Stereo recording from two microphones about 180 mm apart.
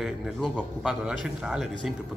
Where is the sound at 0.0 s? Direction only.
Centre (ahead or behind).